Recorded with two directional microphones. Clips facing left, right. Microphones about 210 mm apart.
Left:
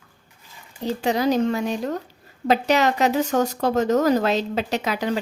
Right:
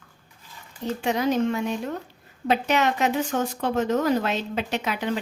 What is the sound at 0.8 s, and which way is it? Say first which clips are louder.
Speech: left 3 dB; 35° left (ahead or behind).